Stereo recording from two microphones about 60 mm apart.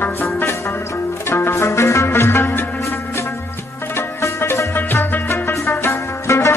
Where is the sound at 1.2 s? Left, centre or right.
Left.